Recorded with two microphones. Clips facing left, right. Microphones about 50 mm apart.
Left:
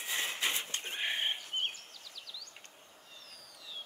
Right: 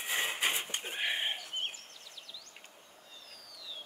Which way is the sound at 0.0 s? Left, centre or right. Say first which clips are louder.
Right 2 dB; right.